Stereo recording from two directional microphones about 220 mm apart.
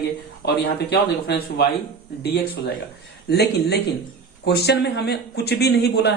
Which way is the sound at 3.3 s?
45° left (ahead or behind).